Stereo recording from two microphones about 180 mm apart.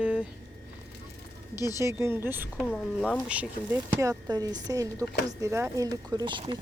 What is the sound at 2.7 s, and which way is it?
Speech, 10° left (ahead or behind).